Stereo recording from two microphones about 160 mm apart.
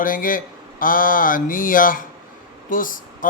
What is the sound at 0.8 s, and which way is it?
Mantra, 60° left (ahead or behind).